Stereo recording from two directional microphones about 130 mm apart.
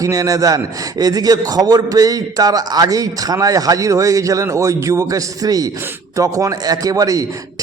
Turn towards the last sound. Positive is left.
turn(degrees=-25)  # may be behind; listen again after turning